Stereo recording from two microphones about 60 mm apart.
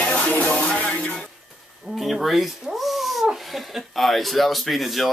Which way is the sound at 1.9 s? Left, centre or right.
Centre.